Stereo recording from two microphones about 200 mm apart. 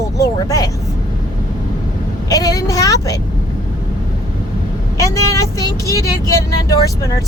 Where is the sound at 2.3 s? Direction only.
15° left (ahead or behind).